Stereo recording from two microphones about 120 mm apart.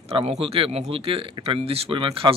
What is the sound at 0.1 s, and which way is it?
Speech, 55° right (ahead or behind).